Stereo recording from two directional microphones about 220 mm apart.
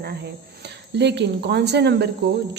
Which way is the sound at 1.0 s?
50° right (ahead or behind).